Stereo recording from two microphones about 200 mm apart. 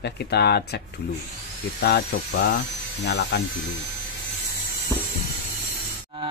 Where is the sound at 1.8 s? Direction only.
55° left (ahead or behind).